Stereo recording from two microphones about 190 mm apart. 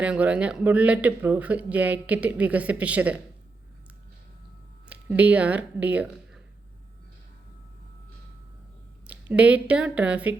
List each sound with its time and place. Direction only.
0.0 s speech: 5° right (ahead or behind)
4.9 s speech: 5° right (ahead or behind)
9.3 s speech: 5° right (ahead or behind)